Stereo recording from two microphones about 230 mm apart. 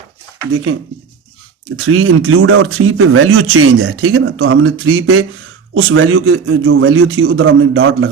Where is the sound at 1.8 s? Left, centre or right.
Right.